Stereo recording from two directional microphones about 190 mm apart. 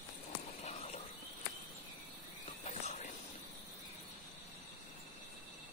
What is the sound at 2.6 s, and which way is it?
Whispering, 35° left (ahead or behind).